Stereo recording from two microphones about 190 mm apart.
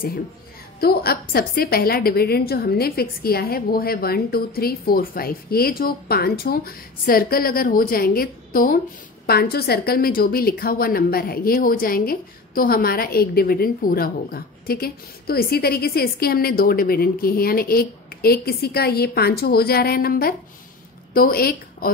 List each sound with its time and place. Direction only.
0.7 s a woman's voice: 55° left (ahead or behind)